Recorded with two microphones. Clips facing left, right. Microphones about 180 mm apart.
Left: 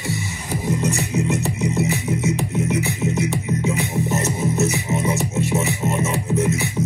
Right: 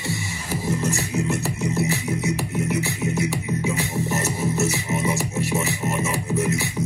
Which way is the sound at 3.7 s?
15° left (ahead or behind).